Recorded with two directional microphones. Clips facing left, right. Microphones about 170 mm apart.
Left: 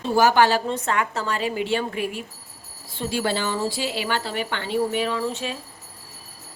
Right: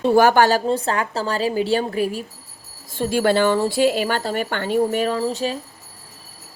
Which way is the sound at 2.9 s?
50° right (ahead or behind).